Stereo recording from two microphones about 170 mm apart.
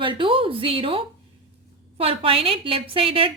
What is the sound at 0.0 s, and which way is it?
A woman's voice, 30° right (ahead or behind).